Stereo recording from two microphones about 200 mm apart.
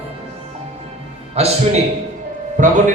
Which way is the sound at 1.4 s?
30° right (ahead or behind).